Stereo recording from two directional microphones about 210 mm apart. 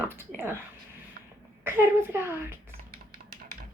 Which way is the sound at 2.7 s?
45° right (ahead or behind).